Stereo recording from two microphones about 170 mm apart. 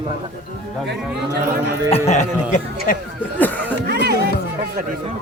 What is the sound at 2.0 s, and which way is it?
Speech, 45° left (ahead or behind).